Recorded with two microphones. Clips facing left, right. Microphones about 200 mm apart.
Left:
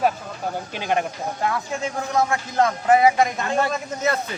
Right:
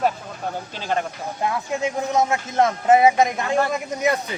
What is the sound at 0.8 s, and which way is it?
Speech, 15° left (ahead or behind).